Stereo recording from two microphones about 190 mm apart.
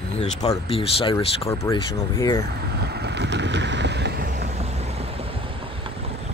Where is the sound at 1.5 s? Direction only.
15° left (ahead or behind).